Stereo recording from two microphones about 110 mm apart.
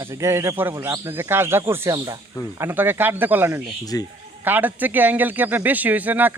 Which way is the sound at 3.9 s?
35° left (ahead or behind).